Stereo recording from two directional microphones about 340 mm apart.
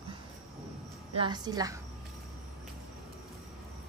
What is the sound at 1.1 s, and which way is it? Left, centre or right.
Speech, centre.